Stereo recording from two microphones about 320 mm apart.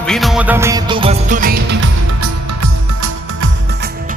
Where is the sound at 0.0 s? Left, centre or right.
Centre; by 1.9 s right.